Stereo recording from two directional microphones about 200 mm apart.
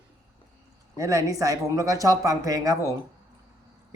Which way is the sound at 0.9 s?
15° right (ahead or behind).